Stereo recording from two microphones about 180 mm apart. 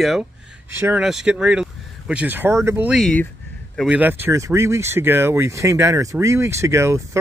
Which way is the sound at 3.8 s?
5° right (ahead or behind).